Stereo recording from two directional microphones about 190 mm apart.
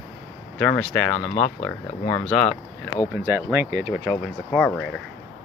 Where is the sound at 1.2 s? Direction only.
30° left (ahead or behind).